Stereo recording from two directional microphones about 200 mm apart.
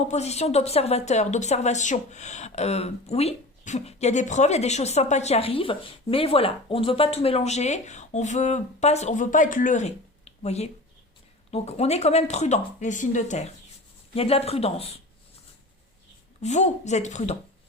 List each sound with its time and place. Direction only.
0.0 s speech: 35° left (ahead or behind)
16.4 s speech: 35° left (ahead or behind)